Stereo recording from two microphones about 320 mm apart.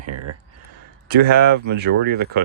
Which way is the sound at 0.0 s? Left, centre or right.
Right.